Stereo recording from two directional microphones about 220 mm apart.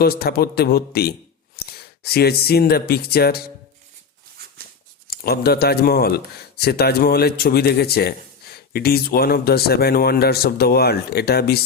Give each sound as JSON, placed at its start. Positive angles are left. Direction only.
{"t": 0.0, "sound": "speech", "side_deg": 45}
{"t": 5.1, "sound": "speech", "side_deg": 45}